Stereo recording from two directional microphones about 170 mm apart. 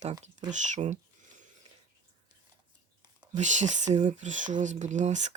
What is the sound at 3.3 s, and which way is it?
Speech, 45° right (ahead or behind).